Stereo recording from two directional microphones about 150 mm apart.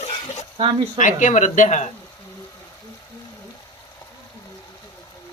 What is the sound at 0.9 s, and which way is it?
Speech, 55° left (ahead or behind).